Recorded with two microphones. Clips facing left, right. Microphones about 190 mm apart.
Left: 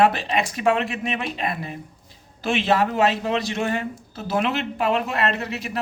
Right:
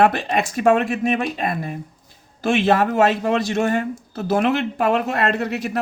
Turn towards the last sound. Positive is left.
turn(degrees=-50)  # may be behind; listen again after turning